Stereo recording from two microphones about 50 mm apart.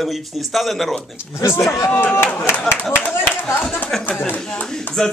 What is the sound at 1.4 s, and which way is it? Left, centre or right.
Speech, left.